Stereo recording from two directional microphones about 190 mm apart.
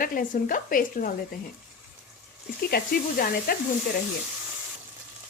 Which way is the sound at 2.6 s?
55° left (ahead or behind).